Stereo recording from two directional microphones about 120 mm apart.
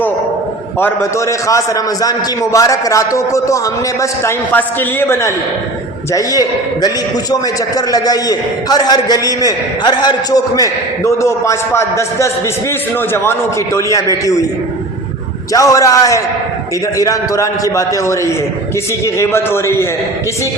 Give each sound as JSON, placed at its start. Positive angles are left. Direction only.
{"t": 0.8, "sound": "a man's voice", "side_deg": 20}
{"t": 7.8, "sound": "a man's voice", "side_deg": 30}
{"t": 13.7, "sound": "a man's voice", "side_deg": 30}
{"t": 15.5, "sound": "a man's voice", "side_deg": 30}